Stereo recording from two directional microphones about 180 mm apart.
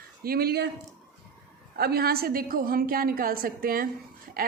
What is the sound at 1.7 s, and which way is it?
Speech, 60° right (ahead or behind).